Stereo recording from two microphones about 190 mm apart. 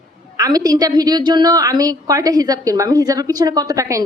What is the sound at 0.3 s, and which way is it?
A woman's voice, 20° right (ahead or behind).